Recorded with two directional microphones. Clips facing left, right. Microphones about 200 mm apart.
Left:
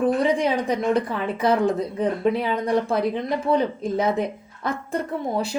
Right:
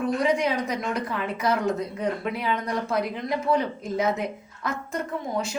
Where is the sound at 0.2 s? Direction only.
30° left (ahead or behind).